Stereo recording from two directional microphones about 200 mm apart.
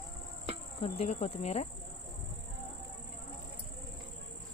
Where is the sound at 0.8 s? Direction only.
30° left (ahead or behind).